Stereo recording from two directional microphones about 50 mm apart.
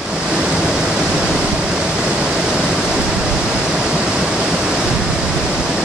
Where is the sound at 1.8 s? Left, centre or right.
Centre.